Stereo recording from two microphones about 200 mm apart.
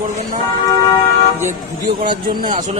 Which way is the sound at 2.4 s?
45° right (ahead or behind).